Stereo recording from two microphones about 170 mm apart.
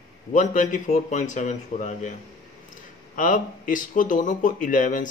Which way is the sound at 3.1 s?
50° left (ahead or behind).